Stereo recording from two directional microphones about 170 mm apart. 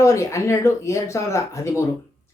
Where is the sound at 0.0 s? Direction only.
15° left (ahead or behind).